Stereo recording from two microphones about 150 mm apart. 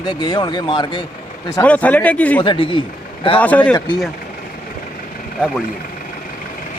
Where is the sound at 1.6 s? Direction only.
10° left (ahead or behind).